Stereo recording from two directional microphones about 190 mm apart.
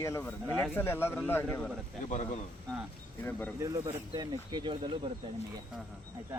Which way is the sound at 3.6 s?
15° right (ahead or behind).